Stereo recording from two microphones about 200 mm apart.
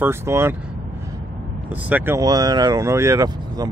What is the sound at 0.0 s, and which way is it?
Speech, 10° right (ahead or behind).